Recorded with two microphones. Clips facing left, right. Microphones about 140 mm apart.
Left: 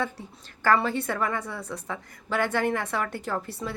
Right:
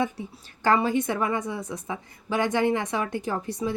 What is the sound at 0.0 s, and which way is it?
A woman's voice, 15° right (ahead or behind).